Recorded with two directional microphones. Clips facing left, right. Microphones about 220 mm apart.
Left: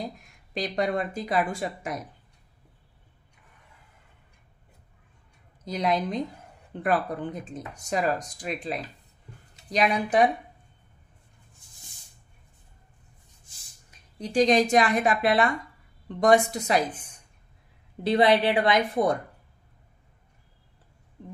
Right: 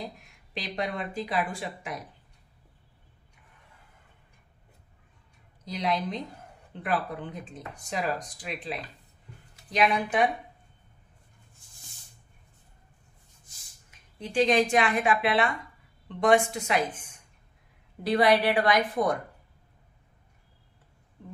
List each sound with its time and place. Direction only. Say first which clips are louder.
0.6 s speech: left 6 dB; 45° left (ahead or behind)
5.7 s a woman's voice: left 3 dB; 45° left (ahead or behind)
13.8 s a woman's voice: left 3 dB; 40° left (ahead or behind)
18.0 s a woman's voice: left 2 dB; 25° left (ahead or behind)